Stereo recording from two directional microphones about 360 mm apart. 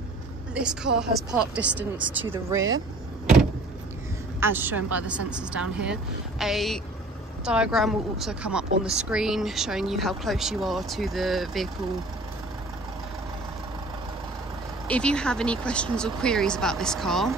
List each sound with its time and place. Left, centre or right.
0.6 s speech: centre
4.4 s speech: centre
14.9 s speech: centre